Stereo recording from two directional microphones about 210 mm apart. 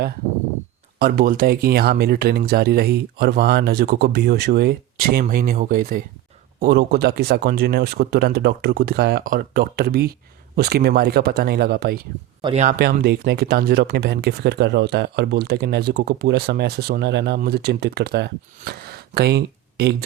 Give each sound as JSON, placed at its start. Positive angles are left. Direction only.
{"t": 0.9, "sound": "speech", "side_deg": -45}
{"t": 12.4, "sound": "speech", "side_deg": -20}
{"t": 12.6, "sound": "speech", "side_deg": -45}